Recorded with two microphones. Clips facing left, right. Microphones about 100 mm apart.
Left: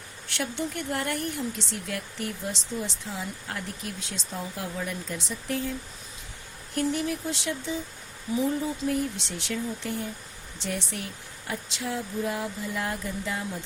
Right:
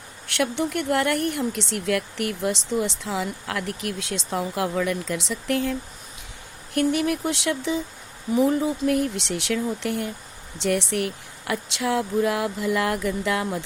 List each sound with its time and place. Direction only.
0.3 s speech: 65° right (ahead or behind); by 5.7 s 90° right
6.7 s speech: 70° right (ahead or behind)